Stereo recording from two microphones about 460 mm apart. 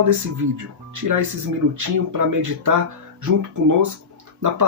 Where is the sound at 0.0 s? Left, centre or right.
Right.